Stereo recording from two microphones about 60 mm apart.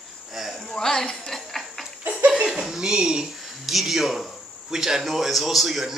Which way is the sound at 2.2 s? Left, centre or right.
Centre.